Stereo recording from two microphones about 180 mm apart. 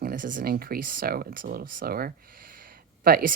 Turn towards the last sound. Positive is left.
turn(degrees=-55)  # may be behind; listen again after turning